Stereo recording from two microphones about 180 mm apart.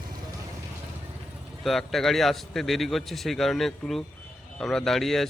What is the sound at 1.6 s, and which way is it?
A man's voice, centre (ahead or behind).